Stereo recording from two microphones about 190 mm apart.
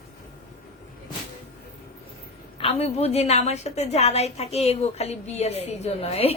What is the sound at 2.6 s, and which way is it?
A woman's voice, 30° left (ahead or behind).